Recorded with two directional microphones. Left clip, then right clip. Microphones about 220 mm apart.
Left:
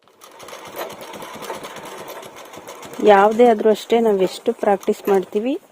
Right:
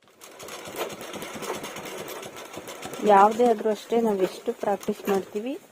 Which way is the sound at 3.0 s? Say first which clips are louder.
Left 6 dB; 50° left (ahead or behind).